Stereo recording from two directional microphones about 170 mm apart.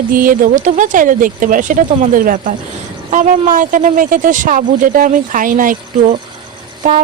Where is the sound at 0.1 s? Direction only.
55° right (ahead or behind).